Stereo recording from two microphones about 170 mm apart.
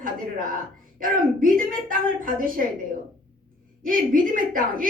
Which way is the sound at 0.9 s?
55° right (ahead or behind).